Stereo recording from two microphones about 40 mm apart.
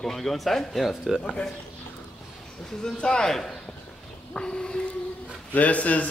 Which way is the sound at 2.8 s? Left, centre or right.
Centre.